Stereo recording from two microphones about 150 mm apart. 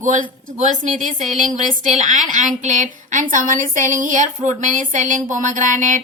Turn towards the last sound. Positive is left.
turn(degrees=-60)  # may be behind; listen again after turning